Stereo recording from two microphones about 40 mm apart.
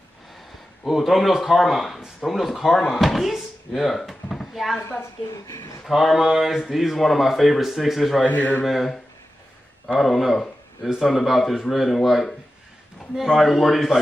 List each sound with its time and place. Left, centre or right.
0.8 s speech: centre
5.9 s speech: centre
8.3 s a man's voice: left
8.6 s speech: centre